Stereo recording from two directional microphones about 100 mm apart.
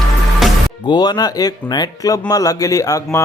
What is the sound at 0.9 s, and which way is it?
Speech, 40° left (ahead or behind).